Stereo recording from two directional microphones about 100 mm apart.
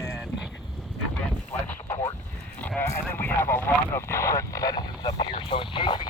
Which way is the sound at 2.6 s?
20° left (ahead or behind).